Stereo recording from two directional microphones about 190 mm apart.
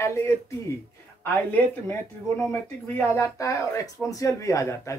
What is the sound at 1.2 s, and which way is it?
Speech, 10° left (ahead or behind).